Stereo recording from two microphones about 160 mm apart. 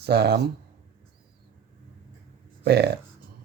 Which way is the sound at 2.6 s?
90° right.